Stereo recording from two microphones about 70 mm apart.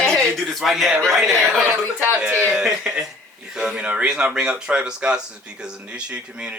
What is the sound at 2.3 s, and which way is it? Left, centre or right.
Speech, centre.